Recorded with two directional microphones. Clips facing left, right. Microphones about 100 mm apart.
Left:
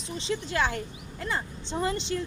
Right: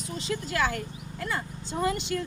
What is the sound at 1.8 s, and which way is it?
Speech, 30° left (ahead or behind).